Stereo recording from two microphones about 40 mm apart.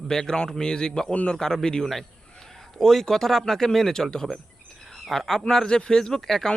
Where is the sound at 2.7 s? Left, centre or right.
Centre.